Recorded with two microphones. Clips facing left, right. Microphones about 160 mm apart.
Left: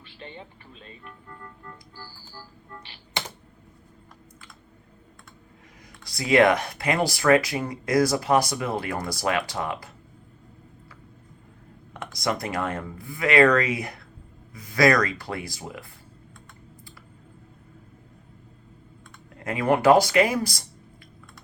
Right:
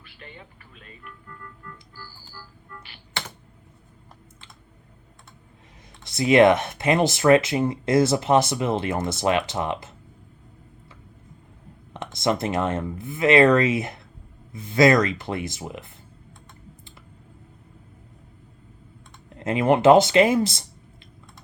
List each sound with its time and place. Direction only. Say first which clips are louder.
0.2 s organ: left 4 dB; 30° left (ahead or behind)
6.1 s speech: right 3 dB; 25° right (ahead or behind)
11.9 s speech: right 4 dB; 25° right (ahead or behind)
19.4 s speech: right 3 dB; 25° right (ahead or behind)